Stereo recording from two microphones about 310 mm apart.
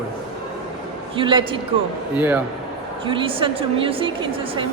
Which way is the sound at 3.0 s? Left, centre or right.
Centre.